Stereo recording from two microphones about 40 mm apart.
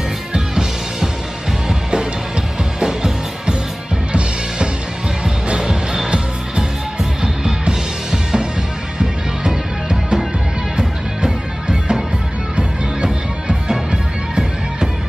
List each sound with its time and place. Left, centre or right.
0.3 s music: centre
5.2 s music: centre